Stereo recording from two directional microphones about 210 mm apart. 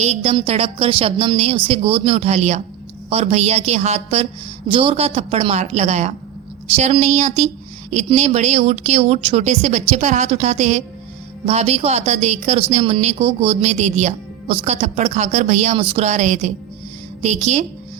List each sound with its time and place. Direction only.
0.0 s a woman's voice: 30° right (ahead or behind)